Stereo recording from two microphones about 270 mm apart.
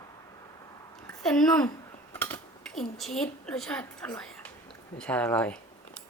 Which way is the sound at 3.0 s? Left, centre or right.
Centre.